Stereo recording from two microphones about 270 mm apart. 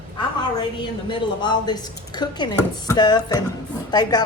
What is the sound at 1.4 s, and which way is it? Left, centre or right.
Speech, centre.